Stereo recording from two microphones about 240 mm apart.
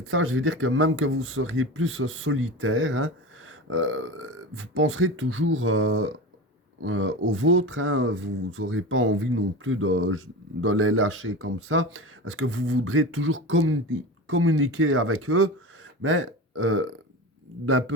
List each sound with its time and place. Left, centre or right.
0.1 s speech: right